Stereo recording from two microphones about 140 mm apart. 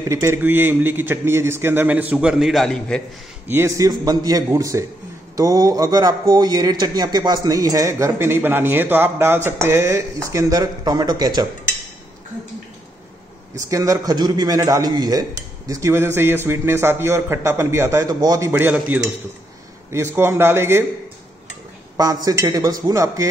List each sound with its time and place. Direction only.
0.1 s a man's voice: 20° right (ahead or behind); by 3.0 s 5° left (ahead or behind)
3.4 s a man's voice: 20° right (ahead or behind)
13.6 s a man's voice: 25° right (ahead or behind)
21.9 s a man's voice: 25° right (ahead or behind)